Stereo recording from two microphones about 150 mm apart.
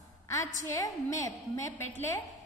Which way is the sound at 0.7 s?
20° left (ahead or behind).